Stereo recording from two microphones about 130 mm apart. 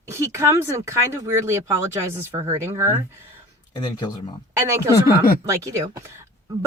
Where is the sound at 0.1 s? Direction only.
20° right (ahead or behind).